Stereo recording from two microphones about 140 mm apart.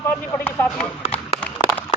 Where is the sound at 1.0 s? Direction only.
45° left (ahead or behind).